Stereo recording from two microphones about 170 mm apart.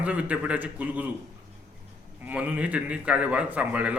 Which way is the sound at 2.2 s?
10° right (ahead or behind).